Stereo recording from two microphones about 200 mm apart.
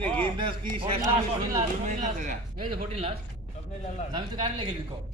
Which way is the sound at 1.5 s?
35° right (ahead or behind).